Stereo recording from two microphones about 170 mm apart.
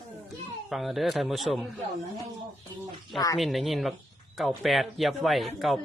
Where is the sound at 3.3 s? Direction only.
Centre (ahead or behind).